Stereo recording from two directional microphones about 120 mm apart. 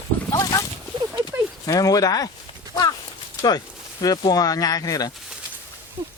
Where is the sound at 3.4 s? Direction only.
35° left (ahead or behind).